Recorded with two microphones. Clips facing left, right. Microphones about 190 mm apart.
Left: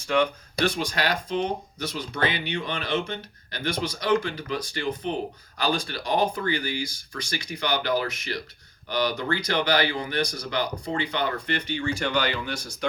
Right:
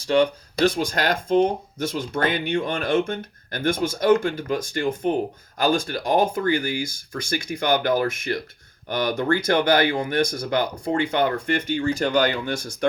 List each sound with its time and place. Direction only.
0.0 s speech: 35° right (ahead or behind); by 12.9 s 50° right (ahead or behind)